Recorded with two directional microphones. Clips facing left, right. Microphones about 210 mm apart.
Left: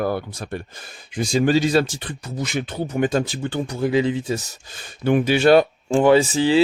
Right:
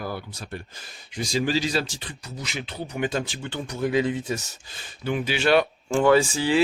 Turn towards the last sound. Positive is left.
turn(degrees=25)  # may be behind; listen again after turning